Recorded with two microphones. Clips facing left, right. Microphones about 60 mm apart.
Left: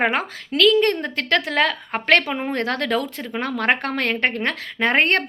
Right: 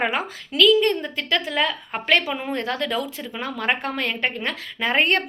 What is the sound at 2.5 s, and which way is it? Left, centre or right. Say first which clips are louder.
Speech: left 4 dB; left.